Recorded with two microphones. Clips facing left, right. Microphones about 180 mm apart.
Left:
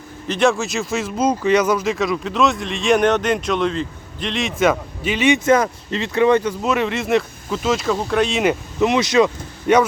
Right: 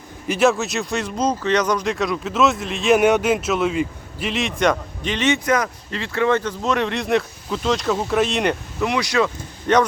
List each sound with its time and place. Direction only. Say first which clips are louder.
0.3 s speech: even; 5° right (ahead or behind)
5.5 s speech: left 5 dB; 30° left (ahead or behind); by 8.5 s centre (ahead or behind)
8.8 s speech: left 5 dB; 20° left (ahead or behind)